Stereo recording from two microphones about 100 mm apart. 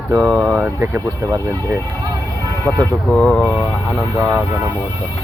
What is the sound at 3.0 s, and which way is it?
Speech, 15° left (ahead or behind).